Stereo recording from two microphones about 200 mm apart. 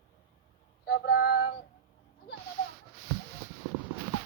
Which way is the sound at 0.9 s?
55° left (ahead or behind).